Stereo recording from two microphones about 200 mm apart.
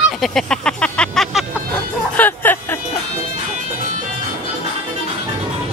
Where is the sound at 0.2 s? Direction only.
Centre (ahead or behind).